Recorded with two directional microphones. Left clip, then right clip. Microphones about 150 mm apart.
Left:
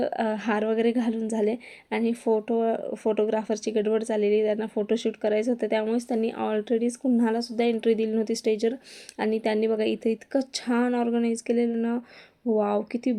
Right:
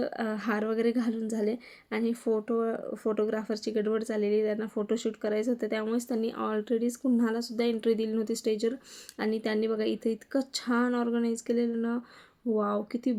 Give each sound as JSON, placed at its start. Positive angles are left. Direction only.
{"t": 0.0, "sound": "a woman's voice", "side_deg": 20}